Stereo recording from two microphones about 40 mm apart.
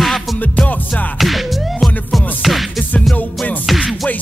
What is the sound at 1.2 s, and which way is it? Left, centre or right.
Music, centre.